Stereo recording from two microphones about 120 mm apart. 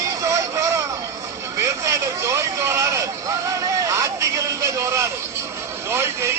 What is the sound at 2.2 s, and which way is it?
Speech, 25° right (ahead or behind).